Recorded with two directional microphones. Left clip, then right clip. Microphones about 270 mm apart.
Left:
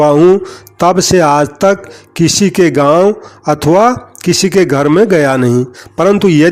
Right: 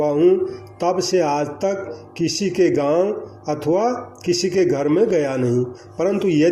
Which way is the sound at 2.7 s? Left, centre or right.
Left.